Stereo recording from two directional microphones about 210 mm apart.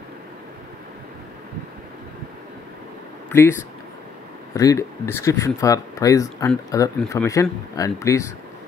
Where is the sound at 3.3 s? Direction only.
10° left (ahead or behind).